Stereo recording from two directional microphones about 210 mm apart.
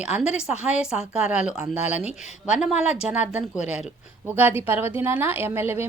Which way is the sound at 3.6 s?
30° left (ahead or behind).